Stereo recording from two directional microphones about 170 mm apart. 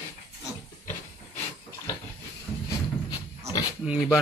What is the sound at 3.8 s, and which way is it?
Speech, 5° right (ahead or behind).